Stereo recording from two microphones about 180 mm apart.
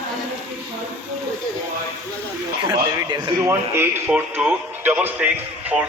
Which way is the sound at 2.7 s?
25° right (ahead or behind).